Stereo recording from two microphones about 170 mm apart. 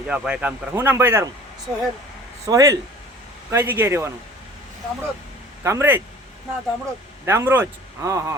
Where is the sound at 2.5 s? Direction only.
20° right (ahead or behind).